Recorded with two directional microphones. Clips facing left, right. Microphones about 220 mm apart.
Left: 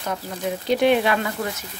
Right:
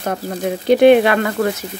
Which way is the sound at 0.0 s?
50° right (ahead or behind).